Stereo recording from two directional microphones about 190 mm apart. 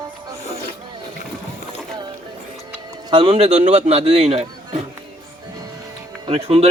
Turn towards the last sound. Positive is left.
turn(degrees=-30)  # may be behind; listen again after turning